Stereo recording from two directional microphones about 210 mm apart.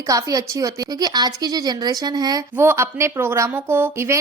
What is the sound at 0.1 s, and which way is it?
A woman's voice, 15° right (ahead or behind).